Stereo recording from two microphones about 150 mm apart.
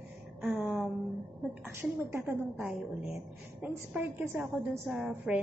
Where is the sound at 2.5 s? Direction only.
Centre (ahead or behind).